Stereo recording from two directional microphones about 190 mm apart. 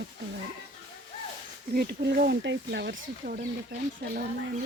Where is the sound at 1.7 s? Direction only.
55° right (ahead or behind).